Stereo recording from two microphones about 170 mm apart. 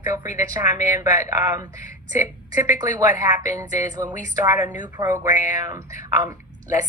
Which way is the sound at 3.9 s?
20° right (ahead or behind).